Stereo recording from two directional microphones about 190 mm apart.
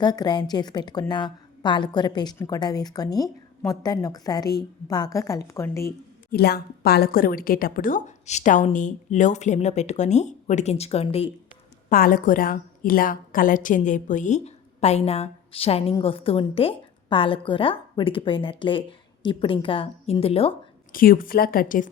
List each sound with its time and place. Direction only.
0.0 s a woman's voice: 20° left (ahead or behind)
6.3 s a woman's voice: 55° left (ahead or behind); by 11.3 s 30° left (ahead or behind)
11.9 s a woman's voice: 50° left (ahead or behind); by 20.6 s 30° left (ahead or behind)
20.9 s a woman's voice: 50° left (ahead or behind)